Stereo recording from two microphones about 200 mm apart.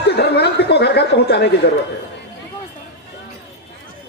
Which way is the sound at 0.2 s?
55° left (ahead or behind).